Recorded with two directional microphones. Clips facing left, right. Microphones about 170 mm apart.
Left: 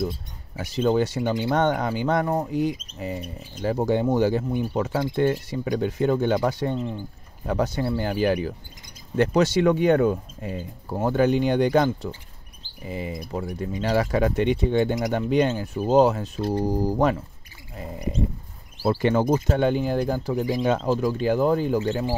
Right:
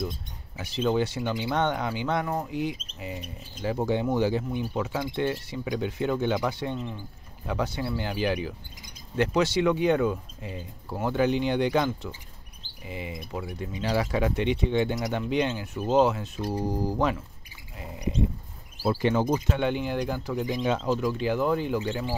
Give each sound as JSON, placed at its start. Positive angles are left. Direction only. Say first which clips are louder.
{"t": 0.6, "sound": "speech", "louder": "left 4 dB", "side_deg": 45}
{"t": 18.9, "sound": "speech", "louder": "left 3 dB", "side_deg": 50}
{"t": 19.4, "sound": "speech", "louder": "left 5 dB", "side_deg": 40}